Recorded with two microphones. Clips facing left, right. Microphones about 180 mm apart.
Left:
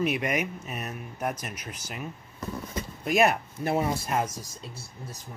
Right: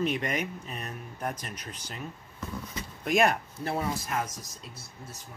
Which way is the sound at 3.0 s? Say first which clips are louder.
Left 2 dB; 5° left (ahead or behind).